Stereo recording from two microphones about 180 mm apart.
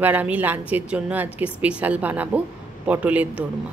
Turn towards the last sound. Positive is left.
turn(degrees=-5)  # may be behind; listen again after turning